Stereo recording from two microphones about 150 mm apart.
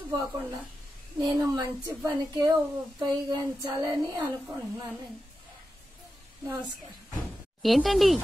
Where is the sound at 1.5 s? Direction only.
25° right (ahead or behind).